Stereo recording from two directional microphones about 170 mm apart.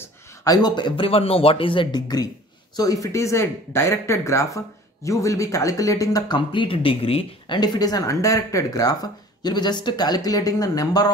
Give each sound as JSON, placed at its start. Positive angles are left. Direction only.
{"t": 0.0, "sound": "a man's voice", "side_deg": 20}